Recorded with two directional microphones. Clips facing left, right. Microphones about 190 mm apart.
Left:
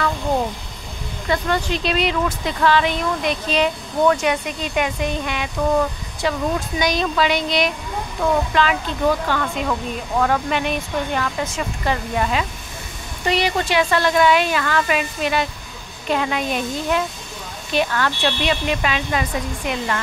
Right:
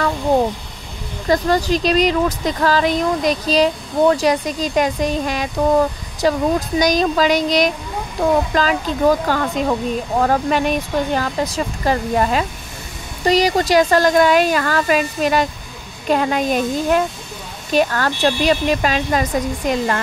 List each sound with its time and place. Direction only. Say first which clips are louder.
1.2 s speech: right 5 dB; 40° right (ahead or behind)